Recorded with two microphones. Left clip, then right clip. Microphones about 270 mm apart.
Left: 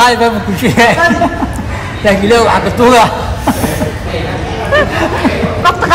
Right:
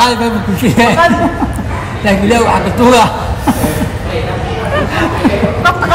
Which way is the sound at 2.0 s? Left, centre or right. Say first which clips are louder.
Left 2 dB; centre.